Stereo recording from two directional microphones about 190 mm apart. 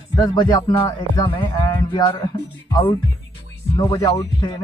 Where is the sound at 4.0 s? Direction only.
20° left (ahead or behind).